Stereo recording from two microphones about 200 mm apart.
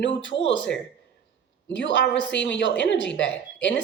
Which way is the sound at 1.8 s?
65° left (ahead or behind).